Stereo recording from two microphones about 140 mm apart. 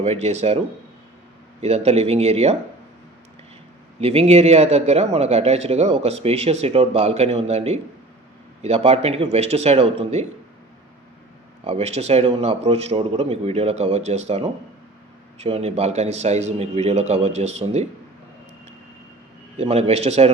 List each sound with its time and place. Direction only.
0.0 s a man's voice: 50° right (ahead or behind)
1.6 s a man's voice: 50° right (ahead or behind)
4.0 s a man's voice: 45° right (ahead or behind)
11.6 s a man's voice: 50° right (ahead or behind)
19.5 s a man's voice: 50° right (ahead or behind)